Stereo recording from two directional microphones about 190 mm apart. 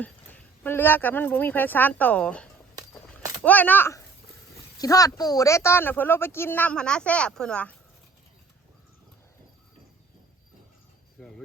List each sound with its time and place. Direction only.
0.0 s speech: 10° left (ahead or behind)